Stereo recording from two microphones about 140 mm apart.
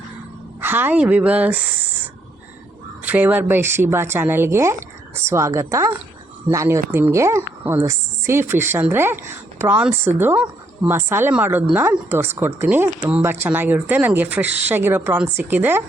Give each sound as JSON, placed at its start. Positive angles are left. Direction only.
{"t": 0.6, "sound": "speech", "side_deg": -15}